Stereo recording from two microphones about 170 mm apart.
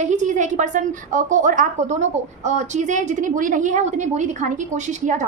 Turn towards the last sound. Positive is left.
turn(degrees=-45)  # may be behind; listen again after turning